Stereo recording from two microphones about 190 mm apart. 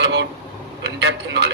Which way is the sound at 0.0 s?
65° right (ahead or behind).